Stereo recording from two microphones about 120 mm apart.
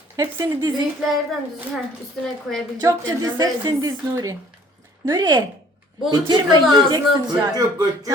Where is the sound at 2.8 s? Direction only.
25° right (ahead or behind).